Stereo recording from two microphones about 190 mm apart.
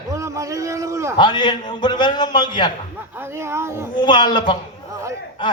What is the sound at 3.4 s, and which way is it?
Speech, 15° right (ahead or behind).